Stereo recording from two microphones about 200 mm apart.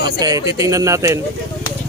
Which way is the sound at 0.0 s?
20° right (ahead or behind).